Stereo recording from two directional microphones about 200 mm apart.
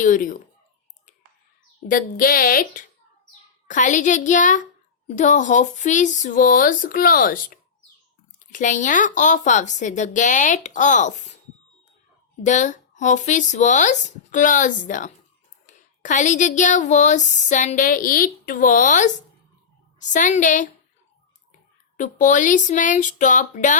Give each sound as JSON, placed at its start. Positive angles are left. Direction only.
{"t": 0.0, "sound": "speech", "side_deg": 40}
{"t": 1.9, "sound": "speech", "side_deg": 45}
{"t": 12.4, "sound": "speech", "side_deg": 40}
{"t": 21.9, "sound": "speech", "side_deg": 40}